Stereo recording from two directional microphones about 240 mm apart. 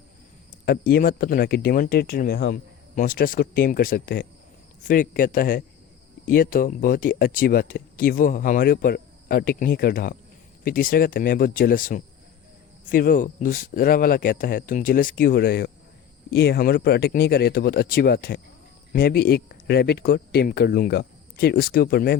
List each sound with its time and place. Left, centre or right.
0.6 s speech: left